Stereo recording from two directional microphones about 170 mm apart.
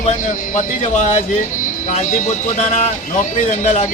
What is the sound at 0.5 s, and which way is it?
Speech, 45° left (ahead or behind).